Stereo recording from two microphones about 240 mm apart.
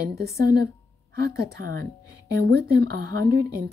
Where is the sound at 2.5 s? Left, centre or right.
Right.